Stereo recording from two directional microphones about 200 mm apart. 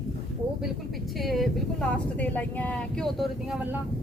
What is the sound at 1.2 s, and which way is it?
Speech, centre (ahead or behind).